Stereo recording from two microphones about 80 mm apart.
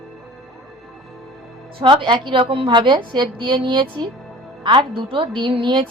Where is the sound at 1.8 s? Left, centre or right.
Right.